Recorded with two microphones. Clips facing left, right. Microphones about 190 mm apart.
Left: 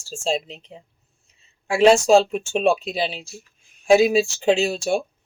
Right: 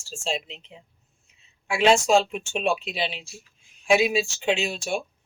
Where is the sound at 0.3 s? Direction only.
40° left (ahead or behind).